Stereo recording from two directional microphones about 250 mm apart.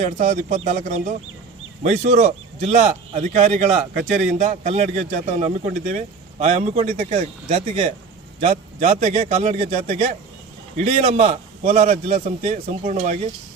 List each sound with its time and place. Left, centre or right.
0.0 s a man's voice: right